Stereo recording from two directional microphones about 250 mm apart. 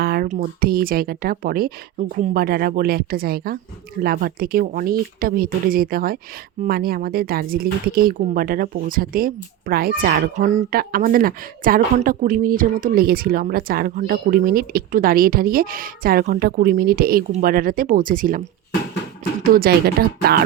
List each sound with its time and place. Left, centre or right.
0.0 s speech: right